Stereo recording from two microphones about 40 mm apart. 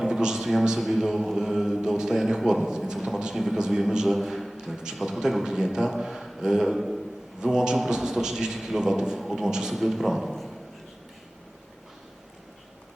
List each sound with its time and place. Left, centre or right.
0.1 s a sound: centre
0.6 s a man's voice: centre
4.9 s a man's voice: centre
5.4 s a man's voice: centre
7.4 s a man's voice: centre